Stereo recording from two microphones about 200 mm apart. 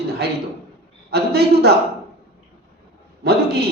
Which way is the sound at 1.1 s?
55° right (ahead or behind).